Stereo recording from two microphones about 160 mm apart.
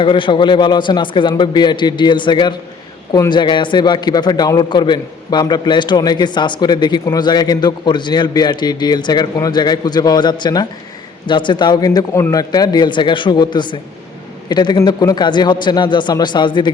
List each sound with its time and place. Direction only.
0.0 s a man's voice: 30° left (ahead or behind)